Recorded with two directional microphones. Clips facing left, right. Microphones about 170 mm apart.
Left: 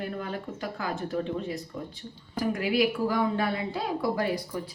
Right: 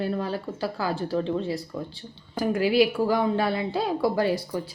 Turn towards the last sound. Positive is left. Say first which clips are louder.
# right 4 dB
turn(degrees=-30)  # may be behind; listen again after turning